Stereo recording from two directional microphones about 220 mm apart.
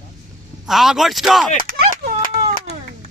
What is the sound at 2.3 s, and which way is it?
Baby cry, 30° right (ahead or behind).